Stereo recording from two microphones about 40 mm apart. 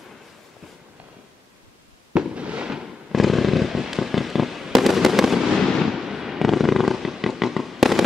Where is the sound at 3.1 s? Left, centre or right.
Centre.